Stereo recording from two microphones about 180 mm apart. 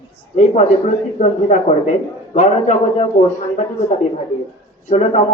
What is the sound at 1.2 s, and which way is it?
Speech, 40° left (ahead or behind).